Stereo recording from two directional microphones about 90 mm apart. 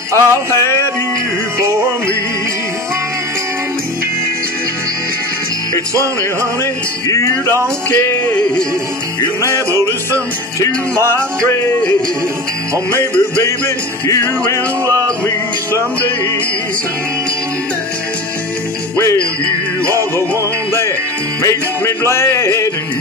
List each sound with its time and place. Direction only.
0.1 s music: 30° left (ahead or behind)
1.6 s music: 30° right (ahead or behind)
6.6 s music: 35° left (ahead or behind)
8.3 s music: 10° left (ahead or behind)
9.7 s music: 35° right (ahead or behind)
10.6 s music: 30° left (ahead or behind)
14.9 s music: 35° right (ahead or behind)
19.4 s music: 35° right (ahead or behind)
21.4 s music: 35° left (ahead or behind)